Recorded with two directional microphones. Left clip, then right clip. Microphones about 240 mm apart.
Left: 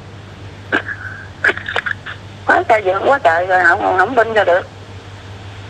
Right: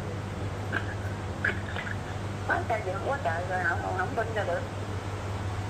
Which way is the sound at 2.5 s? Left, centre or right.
Left.